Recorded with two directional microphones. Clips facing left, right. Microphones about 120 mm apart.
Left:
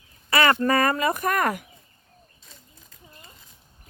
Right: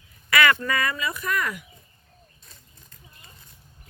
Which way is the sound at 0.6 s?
40° left (ahead or behind).